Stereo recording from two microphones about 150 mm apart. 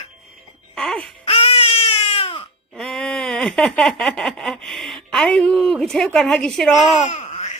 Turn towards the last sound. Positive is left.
turn(degrees=45)  # may be behind; listen again after turning